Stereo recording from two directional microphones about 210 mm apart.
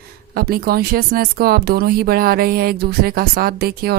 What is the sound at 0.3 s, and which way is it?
Speech, 45° right (ahead or behind).